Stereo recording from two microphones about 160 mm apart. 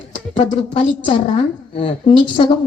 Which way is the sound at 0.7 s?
35° left (ahead or behind).